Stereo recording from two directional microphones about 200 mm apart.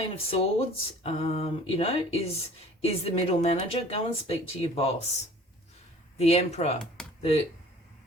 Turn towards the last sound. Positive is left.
turn(degrees=30)  # may be behind; listen again after turning